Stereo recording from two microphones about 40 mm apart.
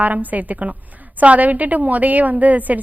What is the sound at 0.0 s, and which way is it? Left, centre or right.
A woman's voice, right.